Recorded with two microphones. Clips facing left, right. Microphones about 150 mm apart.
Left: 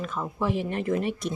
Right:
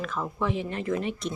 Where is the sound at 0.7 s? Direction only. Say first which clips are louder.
Left 2 dB; 50° left (ahead or behind).